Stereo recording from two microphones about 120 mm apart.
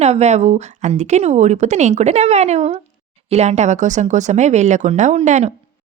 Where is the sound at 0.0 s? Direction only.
65° right (ahead or behind).